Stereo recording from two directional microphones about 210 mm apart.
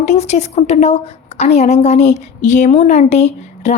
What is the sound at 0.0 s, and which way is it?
A woman's voice, 30° left (ahead or behind).